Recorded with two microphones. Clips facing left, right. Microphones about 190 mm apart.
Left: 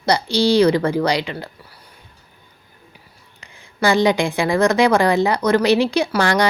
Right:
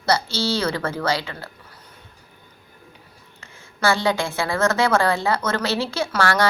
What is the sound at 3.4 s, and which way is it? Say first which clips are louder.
A woman's voice: left 4 dB; 15° left (ahead or behind).